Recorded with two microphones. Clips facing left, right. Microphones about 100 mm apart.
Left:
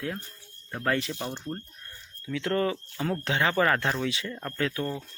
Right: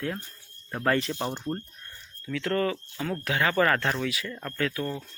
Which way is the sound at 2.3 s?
20° left (ahead or behind).